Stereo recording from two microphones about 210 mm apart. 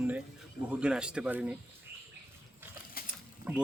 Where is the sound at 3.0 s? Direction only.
45° left (ahead or behind).